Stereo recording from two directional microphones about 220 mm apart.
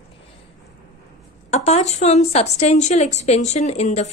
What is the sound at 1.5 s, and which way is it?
A woman's voice, 30° left (ahead or behind).